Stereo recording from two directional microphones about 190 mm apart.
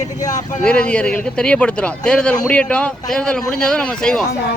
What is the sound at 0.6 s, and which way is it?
Speech, 5° left (ahead or behind).